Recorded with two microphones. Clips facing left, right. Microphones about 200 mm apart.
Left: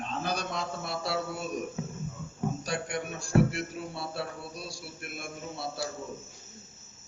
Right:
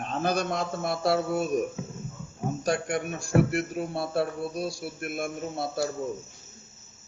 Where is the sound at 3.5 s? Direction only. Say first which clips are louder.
Right 7 dB; 50° right (ahead or behind).